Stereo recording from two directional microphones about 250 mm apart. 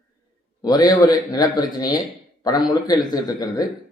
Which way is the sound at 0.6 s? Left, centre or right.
Centre.